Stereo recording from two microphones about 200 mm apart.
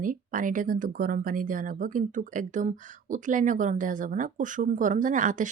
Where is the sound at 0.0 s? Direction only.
40° right (ahead or behind).